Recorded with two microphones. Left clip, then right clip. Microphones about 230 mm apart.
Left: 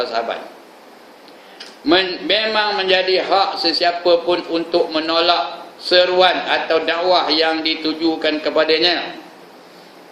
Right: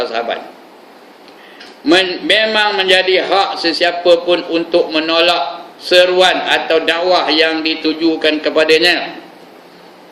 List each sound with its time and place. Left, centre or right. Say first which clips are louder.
0.0 s a man's voice: right 3 dB; centre
1.8 s a man's voice: right 4 dB; centre